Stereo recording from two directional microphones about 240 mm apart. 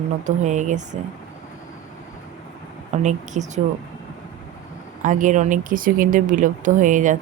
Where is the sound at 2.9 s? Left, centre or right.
Right.